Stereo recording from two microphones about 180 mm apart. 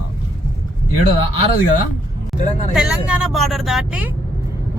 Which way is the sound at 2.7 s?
5° right (ahead or behind).